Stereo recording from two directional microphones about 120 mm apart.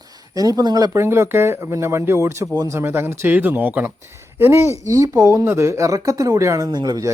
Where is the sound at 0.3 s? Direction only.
30° right (ahead or behind).